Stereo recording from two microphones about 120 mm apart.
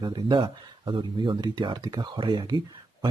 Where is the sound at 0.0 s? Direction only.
40° right (ahead or behind).